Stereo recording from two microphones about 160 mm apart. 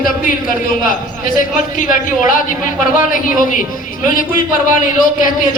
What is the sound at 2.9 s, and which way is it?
Speech, 55° left (ahead or behind).